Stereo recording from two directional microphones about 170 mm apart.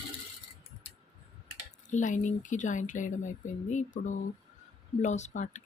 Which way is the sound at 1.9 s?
45° left (ahead or behind).